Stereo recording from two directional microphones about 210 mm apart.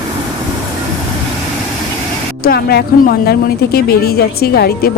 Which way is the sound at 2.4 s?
50° left (ahead or behind).